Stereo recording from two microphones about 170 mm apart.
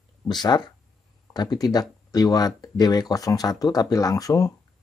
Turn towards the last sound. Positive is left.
turn(degrees=20)  # may be behind; listen again after turning